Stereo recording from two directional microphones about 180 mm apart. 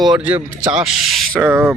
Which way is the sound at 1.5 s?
15° right (ahead or behind).